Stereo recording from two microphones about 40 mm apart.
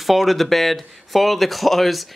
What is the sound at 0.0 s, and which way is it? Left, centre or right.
Speech, centre.